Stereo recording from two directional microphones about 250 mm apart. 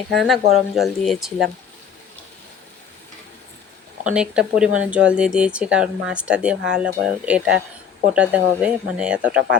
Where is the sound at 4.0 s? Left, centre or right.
Centre.